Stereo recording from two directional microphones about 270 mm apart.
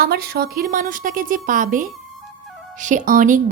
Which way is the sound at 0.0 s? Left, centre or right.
Right.